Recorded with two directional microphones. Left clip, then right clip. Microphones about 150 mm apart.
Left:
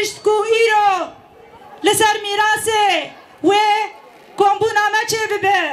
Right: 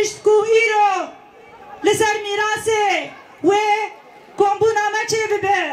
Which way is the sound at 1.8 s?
30° left (ahead or behind).